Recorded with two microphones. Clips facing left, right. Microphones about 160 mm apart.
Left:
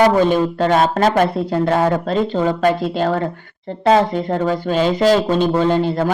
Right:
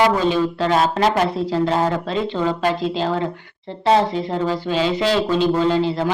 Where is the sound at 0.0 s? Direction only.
50° left (ahead or behind).